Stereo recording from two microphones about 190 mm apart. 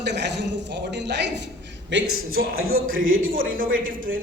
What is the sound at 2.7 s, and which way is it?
A man's voice, 45° right (ahead or behind).